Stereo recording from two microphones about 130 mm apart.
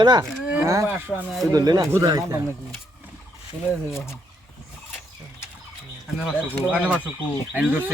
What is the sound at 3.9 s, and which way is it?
Speech, 20° left (ahead or behind).